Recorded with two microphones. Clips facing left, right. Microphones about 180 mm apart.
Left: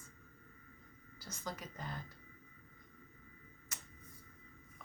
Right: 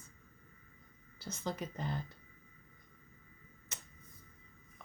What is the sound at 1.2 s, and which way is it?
Speech, 25° right (ahead or behind).